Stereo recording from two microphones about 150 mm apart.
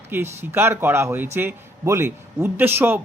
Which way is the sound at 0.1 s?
15° right (ahead or behind).